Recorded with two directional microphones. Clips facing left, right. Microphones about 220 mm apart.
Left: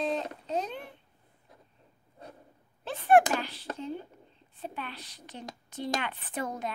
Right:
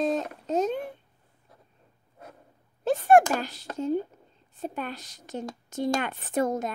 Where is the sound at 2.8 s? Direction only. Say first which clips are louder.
Right 4 dB; 45° right (ahead or behind).